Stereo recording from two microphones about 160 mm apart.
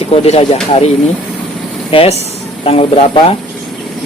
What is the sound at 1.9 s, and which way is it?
Speech, 35° left (ahead or behind).